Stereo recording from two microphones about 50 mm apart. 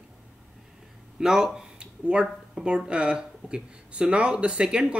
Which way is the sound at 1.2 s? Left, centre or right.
Centre.